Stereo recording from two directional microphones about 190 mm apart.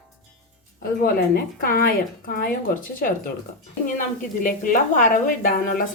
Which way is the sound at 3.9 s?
45° left (ahead or behind).